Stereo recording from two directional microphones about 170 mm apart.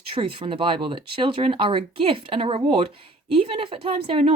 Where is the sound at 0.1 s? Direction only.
30° right (ahead or behind).